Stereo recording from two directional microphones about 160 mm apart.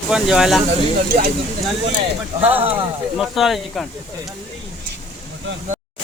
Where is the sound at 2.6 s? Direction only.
35° right (ahead or behind).